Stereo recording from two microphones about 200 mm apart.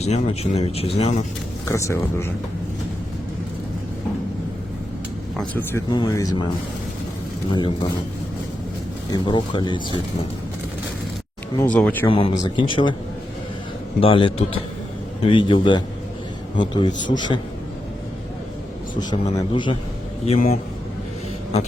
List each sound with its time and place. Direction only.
0.0 s speech: 30° left (ahead or behind)
1.6 s speech: 15° left (ahead or behind)
5.4 s speech: 10° left (ahead or behind)
7.5 s speech: 25° left (ahead or behind)
9.0 s speech: 25° left (ahead or behind)
11.5 s speech: 5° left (ahead or behind)
12.0 s speech: 25° left (ahead or behind)
14.0 s speech: 25° left (ahead or behind)
18.9 s speech: 20° left (ahead or behind)